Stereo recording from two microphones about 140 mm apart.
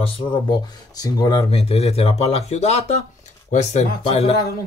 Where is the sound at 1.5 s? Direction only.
45° left (ahead or behind).